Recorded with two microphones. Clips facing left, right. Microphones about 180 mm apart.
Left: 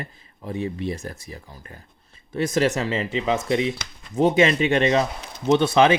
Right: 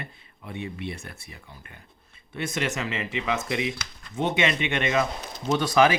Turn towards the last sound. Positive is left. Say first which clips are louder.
# left 4 dB
turn(degrees=25)  # may be behind; listen again after turning